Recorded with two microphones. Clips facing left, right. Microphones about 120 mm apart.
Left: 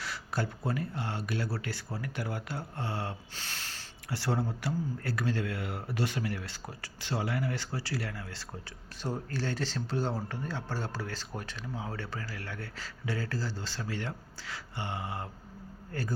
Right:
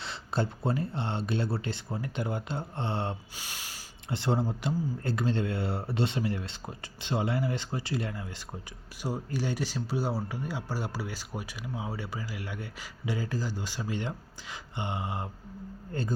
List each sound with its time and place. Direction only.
0.0 s speech: 25° right (ahead or behind)
3.3 s speech: 10° right (ahead or behind)